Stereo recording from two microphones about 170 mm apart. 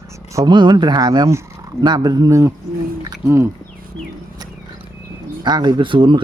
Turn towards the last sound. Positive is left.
turn(degrees=-30)  # may be behind; listen again after turning